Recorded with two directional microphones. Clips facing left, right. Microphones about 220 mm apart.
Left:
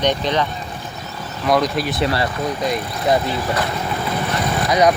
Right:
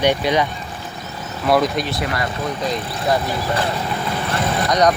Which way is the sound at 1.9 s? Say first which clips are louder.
Left 4 dB; 30° left (ahead or behind).